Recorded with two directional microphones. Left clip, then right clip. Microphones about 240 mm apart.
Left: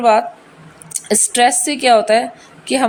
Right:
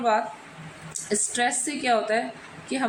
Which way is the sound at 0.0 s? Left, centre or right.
Left.